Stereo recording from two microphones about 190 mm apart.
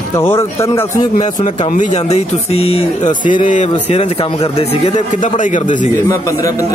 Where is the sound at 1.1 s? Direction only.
40° left (ahead or behind).